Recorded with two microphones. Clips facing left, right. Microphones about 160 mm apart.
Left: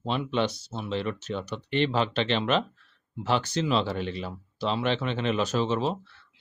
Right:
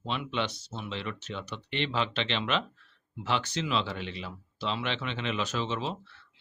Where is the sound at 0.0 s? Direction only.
40° left (ahead or behind).